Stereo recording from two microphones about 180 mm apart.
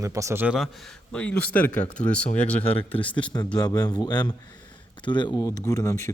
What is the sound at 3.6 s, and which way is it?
A man's voice, 20° left (ahead or behind).